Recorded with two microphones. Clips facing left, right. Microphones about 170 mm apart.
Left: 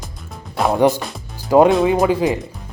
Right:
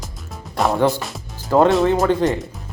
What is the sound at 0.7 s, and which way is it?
Speech, 15° left (ahead or behind).